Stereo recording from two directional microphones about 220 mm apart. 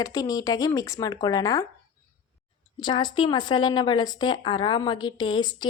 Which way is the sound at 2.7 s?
20° left (ahead or behind).